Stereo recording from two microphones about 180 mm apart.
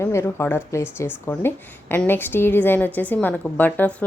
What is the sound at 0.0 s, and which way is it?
Speech, 15° left (ahead or behind).